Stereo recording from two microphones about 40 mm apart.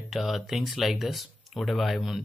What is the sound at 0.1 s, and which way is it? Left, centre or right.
Speech, centre.